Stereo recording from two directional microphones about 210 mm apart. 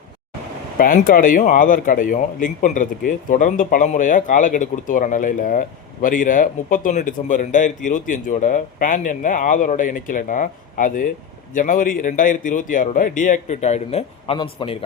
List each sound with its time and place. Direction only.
0.8 s speech: 40° left (ahead or behind); by 14.8 s 25° left (ahead or behind)